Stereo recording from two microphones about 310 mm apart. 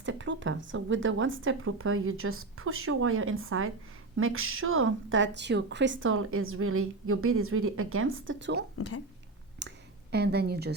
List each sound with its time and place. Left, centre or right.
0.0 s speech: right
9.6 s clicking: right